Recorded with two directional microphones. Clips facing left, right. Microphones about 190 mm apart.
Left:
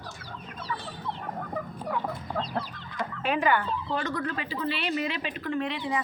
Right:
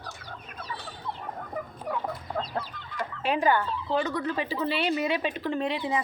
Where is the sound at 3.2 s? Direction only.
35° right (ahead or behind).